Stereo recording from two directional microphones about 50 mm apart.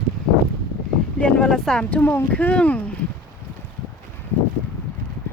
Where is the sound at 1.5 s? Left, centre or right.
Centre.